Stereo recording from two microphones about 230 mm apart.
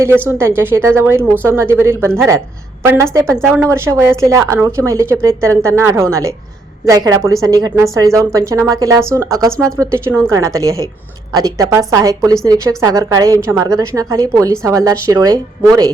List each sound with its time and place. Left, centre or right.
0.0 s a woman's voice: centre